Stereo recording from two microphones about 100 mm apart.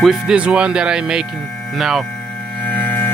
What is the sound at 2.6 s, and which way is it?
Music, 15° left (ahead or behind).